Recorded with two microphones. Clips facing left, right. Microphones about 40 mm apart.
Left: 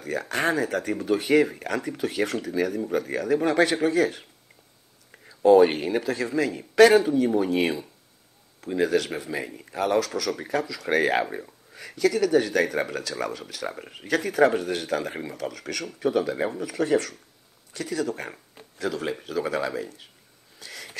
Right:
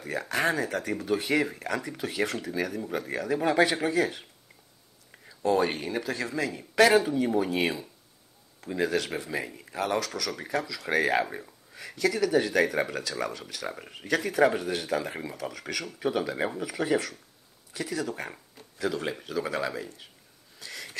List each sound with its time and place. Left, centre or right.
0.0 s speech: centre
5.4 s speech: centre
6.0 s speech: centre
11.0 s speech: centre
20.5 s a sound: centre